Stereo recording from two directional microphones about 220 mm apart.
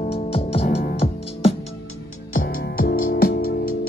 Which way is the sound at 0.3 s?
25° left (ahead or behind).